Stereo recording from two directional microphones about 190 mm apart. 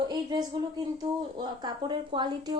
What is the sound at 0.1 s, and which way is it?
A woman's voice, 20° right (ahead or behind).